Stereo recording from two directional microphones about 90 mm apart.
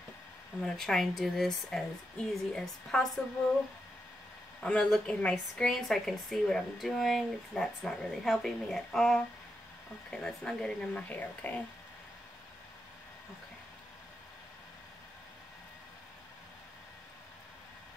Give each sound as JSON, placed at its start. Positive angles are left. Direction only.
{"t": 0.6, "sound": "speech", "side_deg": 5}
{"t": 4.6, "sound": "speech", "side_deg": 10}